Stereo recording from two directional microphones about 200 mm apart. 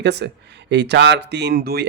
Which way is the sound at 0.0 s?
60° right (ahead or behind).